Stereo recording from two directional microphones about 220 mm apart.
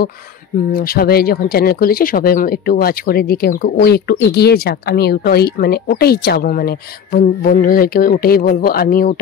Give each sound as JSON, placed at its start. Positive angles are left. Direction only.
{"t": 0.7, "sound": "speech", "side_deg": 45}